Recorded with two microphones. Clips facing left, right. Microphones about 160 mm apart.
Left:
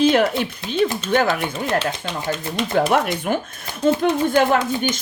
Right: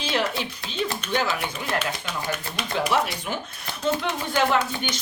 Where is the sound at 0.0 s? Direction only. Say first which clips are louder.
Left 10 dB; 50° left (ahead or behind).